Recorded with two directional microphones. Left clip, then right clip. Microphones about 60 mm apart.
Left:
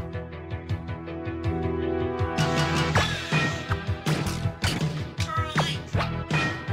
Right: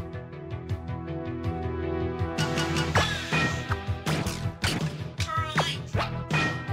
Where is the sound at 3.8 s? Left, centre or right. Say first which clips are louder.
Left 2 dB; left.